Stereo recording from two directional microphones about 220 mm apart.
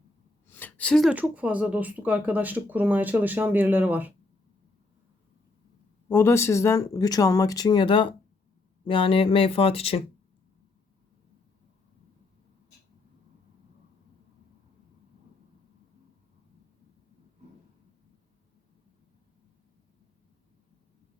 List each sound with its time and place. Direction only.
0.4 s speech: 10° left (ahead or behind); by 4.1 s 10° right (ahead or behind)
6.1 s speech: 10° left (ahead or behind); by 10.0 s 25° left (ahead or behind)